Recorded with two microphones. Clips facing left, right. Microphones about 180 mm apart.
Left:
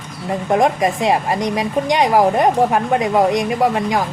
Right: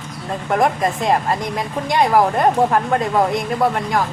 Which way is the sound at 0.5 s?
15° left (ahead or behind).